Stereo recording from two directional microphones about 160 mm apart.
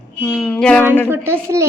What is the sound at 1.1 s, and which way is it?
Speech, 15° right (ahead or behind).